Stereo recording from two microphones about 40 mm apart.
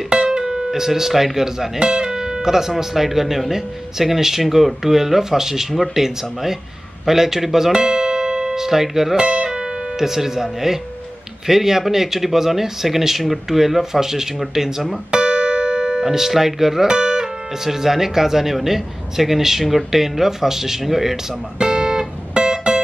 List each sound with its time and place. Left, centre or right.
0.1 s speech: right
1.8 s speech: right
7.7 s music: right
8.5 s speech: centre
9.1 s speech: right
9.5 s speech: centre
15.0 s music: right; by 16.8 s centre
16.8 s music: right
17.6 s speech: centre
21.5 s music: centre